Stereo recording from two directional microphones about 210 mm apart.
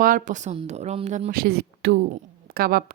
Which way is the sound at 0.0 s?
40° right (ahead or behind).